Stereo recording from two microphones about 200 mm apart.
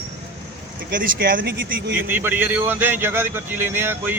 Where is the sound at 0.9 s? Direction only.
45° right (ahead or behind).